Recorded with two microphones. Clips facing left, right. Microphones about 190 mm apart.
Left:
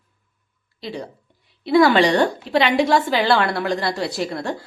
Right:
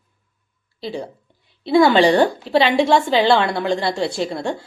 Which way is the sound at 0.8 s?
30° right (ahead or behind).